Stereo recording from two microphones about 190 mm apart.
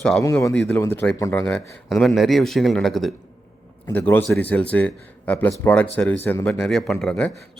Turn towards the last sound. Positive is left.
turn(degrees=5)  # may be behind; listen again after turning